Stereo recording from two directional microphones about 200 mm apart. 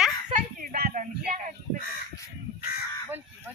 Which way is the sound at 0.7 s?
45° right (ahead or behind).